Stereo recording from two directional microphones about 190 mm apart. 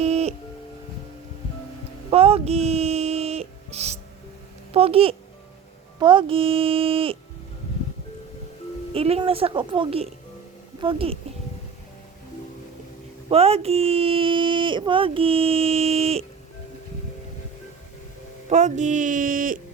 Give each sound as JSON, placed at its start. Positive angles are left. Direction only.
{"t": 0.0, "sound": "music", "side_deg": -35}
{"t": 2.0, "sound": "music", "side_deg": -30}
{"t": 4.7, "sound": "a child's voice", "side_deg": -30}
{"t": 8.9, "sound": "speech", "side_deg": -30}
{"t": 13.3, "sound": "speech", "side_deg": -30}
{"t": 18.4, "sound": "speech", "side_deg": -40}